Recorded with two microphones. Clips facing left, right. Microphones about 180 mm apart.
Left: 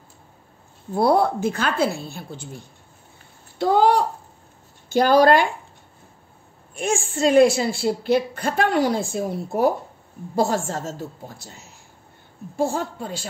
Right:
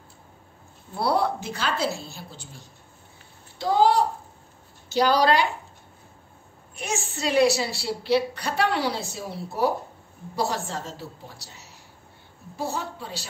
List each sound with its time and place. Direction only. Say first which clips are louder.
0.9 s a woman's voice: left 6 dB; 50° left (ahead or behind)
6.7 s a woman's voice: left 7 dB; 50° left (ahead or behind)